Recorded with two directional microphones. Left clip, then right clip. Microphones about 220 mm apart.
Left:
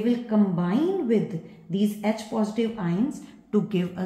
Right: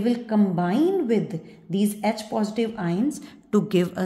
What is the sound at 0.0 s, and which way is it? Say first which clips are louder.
A woman's voice: right 1 dB; 45° right (ahead or behind).